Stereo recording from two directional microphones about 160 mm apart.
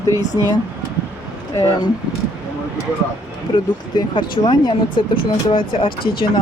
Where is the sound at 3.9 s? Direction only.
30° left (ahead or behind).